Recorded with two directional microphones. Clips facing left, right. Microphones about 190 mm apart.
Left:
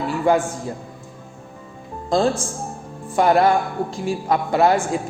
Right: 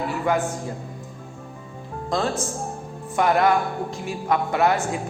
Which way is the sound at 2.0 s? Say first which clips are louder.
Left 5 dB; 30° left (ahead or behind).